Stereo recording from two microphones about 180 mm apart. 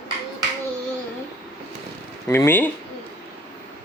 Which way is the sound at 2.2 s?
10° left (ahead or behind).